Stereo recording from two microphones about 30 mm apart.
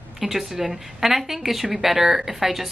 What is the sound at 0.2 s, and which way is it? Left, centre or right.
A woman's voice, centre.